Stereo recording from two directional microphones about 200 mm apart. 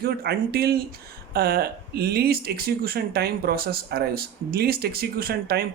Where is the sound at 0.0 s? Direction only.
50° right (ahead or behind).